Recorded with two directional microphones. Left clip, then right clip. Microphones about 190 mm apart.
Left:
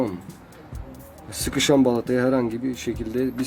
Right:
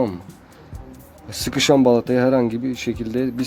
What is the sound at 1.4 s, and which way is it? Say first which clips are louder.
Speech: right 3 dB; 40° right (ahead or behind).